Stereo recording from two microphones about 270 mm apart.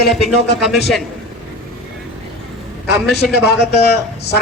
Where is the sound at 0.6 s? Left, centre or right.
Centre.